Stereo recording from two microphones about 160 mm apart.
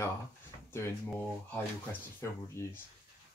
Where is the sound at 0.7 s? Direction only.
15° left (ahead or behind).